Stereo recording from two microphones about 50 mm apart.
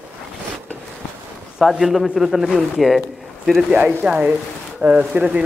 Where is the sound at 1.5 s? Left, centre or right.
Centre.